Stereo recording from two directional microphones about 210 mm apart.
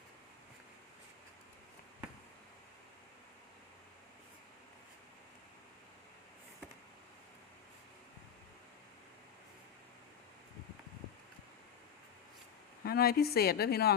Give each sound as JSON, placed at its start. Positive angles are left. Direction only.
{"t": 12.8, "sound": "speech", "side_deg": 45}